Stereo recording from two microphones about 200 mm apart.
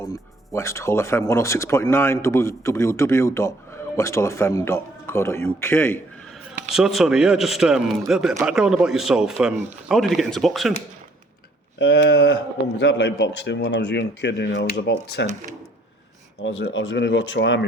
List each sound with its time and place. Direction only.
0.0 s speech: 15° left (ahead or behind)
6.7 s a man's voice: centre (ahead or behind)
11.8 s speech: 60° left (ahead or behind)
16.4 s speech: 65° left (ahead or behind)